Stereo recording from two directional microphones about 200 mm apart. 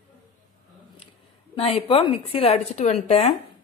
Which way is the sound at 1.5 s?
30° left (ahead or behind).